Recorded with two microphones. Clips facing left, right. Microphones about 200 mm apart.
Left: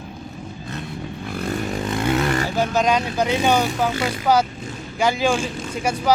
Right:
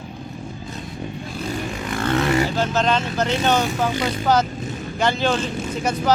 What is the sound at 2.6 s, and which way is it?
Speech, 10° left (ahead or behind).